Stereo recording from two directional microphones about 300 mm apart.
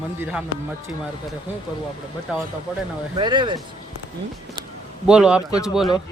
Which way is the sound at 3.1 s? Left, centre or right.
Centre.